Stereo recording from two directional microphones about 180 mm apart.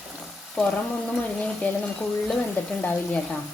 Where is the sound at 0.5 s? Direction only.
5° left (ahead or behind).